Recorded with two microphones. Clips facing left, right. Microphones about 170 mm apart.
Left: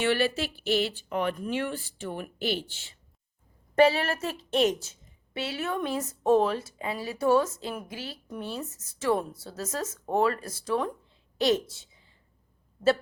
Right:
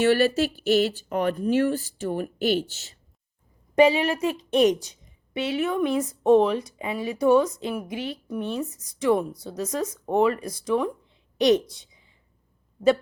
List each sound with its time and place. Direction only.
0.0 s speech: 40° right (ahead or behind)
3.8 s a woman's voice: 15° right (ahead or behind)